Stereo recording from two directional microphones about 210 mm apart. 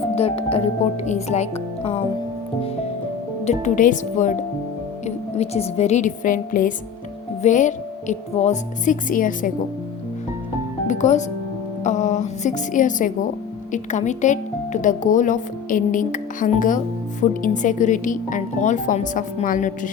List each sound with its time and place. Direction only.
0.2 s speech: 30° left (ahead or behind)
3.4 s speech: 35° left (ahead or behind)
10.8 s speech: 35° left (ahead or behind)